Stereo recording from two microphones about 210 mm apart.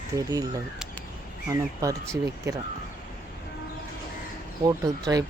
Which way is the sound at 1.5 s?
15° right (ahead or behind).